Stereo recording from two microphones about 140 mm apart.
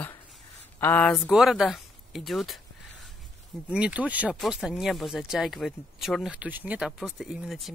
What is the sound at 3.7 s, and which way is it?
Speech, 10° right (ahead or behind).